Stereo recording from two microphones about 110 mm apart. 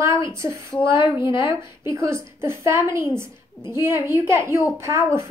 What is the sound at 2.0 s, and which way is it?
A woman's voice, 25° right (ahead or behind).